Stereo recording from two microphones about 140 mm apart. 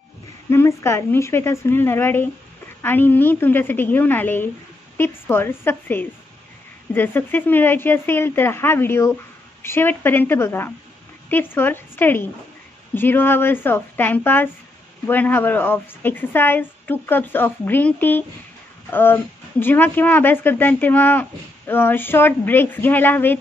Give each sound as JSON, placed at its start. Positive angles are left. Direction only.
{"t": 0.5, "sound": "a woman's voice", "side_deg": 20}